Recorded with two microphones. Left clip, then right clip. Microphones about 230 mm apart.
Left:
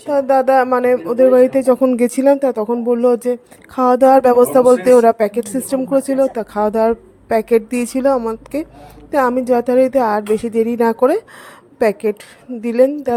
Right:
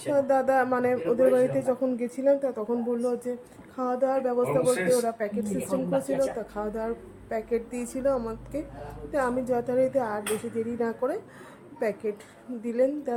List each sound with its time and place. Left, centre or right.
0.1 s speech: left